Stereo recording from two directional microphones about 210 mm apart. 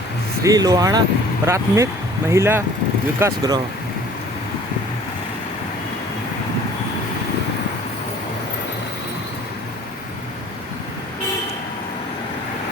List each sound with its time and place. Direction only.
0.4 s speech: 15° right (ahead or behind)